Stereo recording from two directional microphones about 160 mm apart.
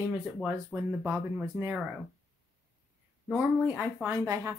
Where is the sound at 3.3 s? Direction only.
10° right (ahead or behind).